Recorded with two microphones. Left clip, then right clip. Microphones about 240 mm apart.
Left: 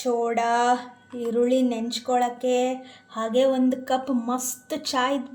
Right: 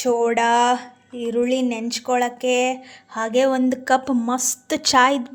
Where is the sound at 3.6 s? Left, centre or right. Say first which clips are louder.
Right 5 dB; right.